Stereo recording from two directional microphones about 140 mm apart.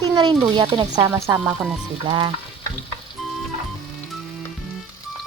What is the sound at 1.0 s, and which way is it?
Speech, 20° right (ahead or behind).